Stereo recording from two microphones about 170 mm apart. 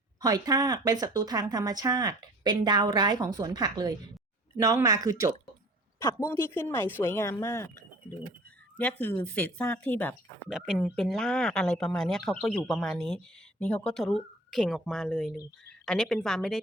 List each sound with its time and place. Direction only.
0.2 s speech: 20° right (ahead or behind)
6.2 s speech: 10° left (ahead or behind)